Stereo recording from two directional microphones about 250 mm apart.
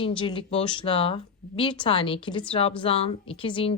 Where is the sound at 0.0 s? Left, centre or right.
Centre.